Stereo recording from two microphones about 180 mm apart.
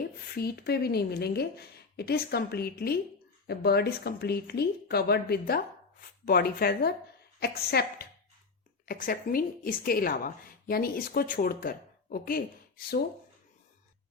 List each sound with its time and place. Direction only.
0.0 s speech: 60° left (ahead or behind)
8.9 s a woman's voice: 50° left (ahead or behind)